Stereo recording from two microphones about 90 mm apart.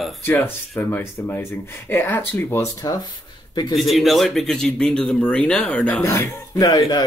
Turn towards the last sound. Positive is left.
turn(degrees=45)  # may be behind; listen again after turning